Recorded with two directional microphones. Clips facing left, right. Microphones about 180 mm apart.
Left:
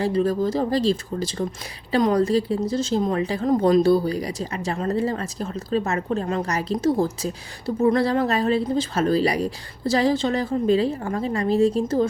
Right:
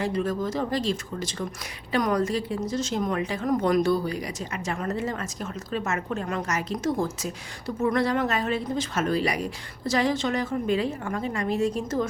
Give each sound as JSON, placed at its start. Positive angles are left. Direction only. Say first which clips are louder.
{"t": 0.0, "sound": "speech", "louder": "left 5 dB", "side_deg": 35}